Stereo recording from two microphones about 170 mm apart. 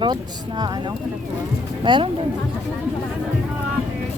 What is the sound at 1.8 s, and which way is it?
Speech, 30° right (ahead or behind).